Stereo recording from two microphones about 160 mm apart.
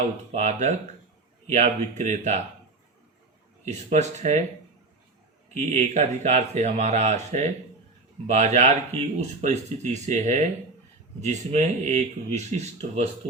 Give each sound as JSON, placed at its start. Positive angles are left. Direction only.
{"t": 0.3, "sound": "speech", "side_deg": -45}
{"t": 3.7, "sound": "speech", "side_deg": -45}
{"t": 5.5, "sound": "speech", "side_deg": -45}